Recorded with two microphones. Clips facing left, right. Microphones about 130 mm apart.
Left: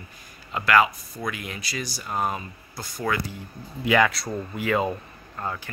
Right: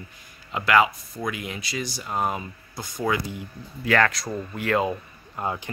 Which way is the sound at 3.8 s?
10° left (ahead or behind).